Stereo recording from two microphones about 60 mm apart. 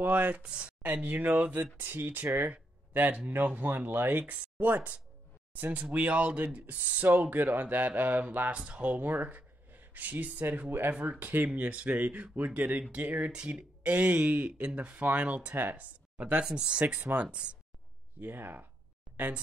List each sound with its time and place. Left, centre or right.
0.0 s speech: right
2.4 s a sound: right
3.3 s speech: right
9.0 s a sound: right
10.5 s speech: right
15.5 s speech: right
15.8 s speech: right
16.9 s speech: right
18.2 s speech: right